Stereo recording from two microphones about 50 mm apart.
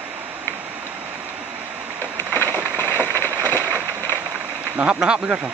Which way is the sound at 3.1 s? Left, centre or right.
Left.